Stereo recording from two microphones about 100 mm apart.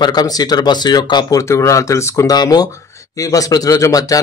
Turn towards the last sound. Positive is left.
turn(degrees=35)  # may be behind; listen again after turning